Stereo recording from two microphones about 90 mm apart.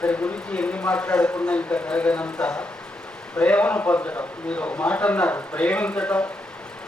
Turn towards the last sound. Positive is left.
turn(degrees=15)  # may be behind; listen again after turning